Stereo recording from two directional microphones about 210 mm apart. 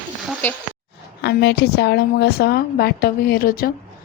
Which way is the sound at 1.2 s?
55° left (ahead or behind).